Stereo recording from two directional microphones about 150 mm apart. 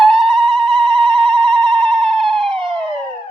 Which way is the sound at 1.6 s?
5° left (ahead or behind).